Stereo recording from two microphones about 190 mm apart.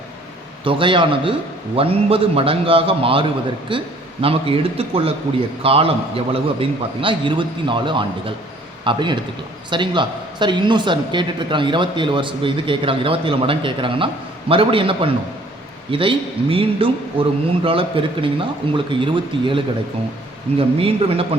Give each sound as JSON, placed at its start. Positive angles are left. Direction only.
{"t": 0.6, "sound": "a man's voice", "side_deg": -25}